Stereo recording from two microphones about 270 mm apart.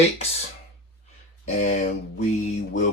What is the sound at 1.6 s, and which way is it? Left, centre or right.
Speech, left.